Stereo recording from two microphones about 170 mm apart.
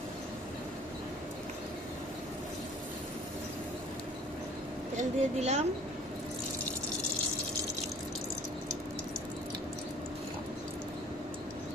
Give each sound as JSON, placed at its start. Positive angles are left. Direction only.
{"t": 4.9, "sound": "speech", "side_deg": -40}